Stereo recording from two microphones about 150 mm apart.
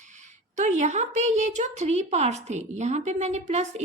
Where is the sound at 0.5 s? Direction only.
50° right (ahead or behind).